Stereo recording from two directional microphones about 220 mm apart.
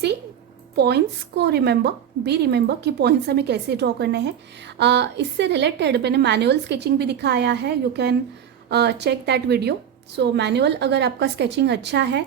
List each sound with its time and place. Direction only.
0.8 s a woman's voice: 50° right (ahead or behind)